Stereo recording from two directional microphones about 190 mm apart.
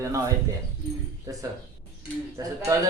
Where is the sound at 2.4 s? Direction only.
20° right (ahead or behind).